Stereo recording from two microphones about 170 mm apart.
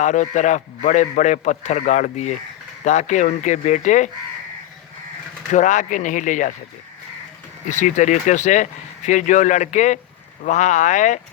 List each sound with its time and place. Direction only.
0.0 s a man's voice: 45° left (ahead or behind)
5.5 s a man's voice: 45° left (ahead or behind)
7.7 s a man's voice: 45° left (ahead or behind)